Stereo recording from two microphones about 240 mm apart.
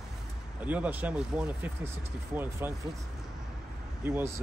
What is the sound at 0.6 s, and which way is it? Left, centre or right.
Speech, centre.